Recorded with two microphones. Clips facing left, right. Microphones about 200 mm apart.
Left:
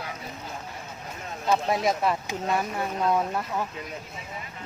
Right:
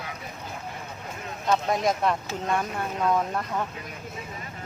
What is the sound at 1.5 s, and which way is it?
Speech, 5° left (ahead or behind).